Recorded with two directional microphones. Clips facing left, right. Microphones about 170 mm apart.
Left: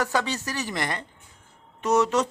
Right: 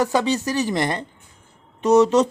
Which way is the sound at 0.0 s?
20° right (ahead or behind).